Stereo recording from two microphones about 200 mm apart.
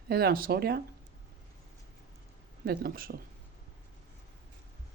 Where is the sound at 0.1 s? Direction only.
50° right (ahead or behind).